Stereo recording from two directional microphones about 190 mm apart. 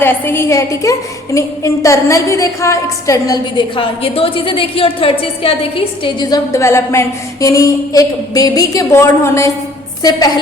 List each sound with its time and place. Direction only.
0.0 s a woman's voice: 10° left (ahead or behind)